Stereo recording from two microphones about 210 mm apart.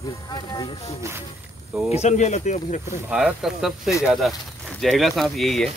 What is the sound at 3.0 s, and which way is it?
Speech, 5° right (ahead or behind).